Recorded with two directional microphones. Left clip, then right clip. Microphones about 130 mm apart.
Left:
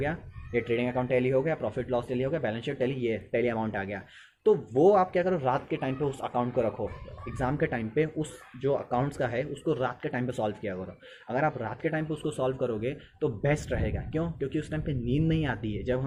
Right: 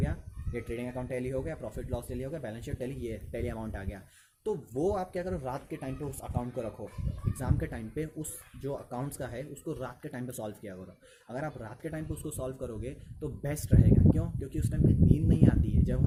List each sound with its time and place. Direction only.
0.0 s a man's voice: 40° right (ahead or behind)